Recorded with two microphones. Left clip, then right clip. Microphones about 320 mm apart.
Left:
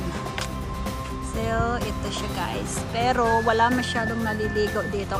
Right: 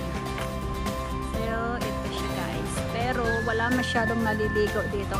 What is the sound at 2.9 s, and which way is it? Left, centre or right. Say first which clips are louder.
Speech: left 7 dB; centre.